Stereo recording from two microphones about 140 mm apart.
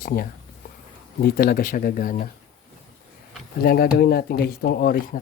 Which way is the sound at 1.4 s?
90° left.